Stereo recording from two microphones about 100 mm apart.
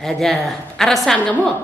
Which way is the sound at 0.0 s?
5° left (ahead or behind).